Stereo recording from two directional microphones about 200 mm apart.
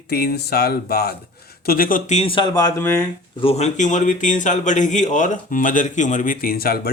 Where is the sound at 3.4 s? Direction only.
30° left (ahead or behind).